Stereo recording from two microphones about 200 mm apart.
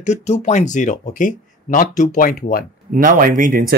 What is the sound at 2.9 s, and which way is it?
Speech, 40° right (ahead or behind).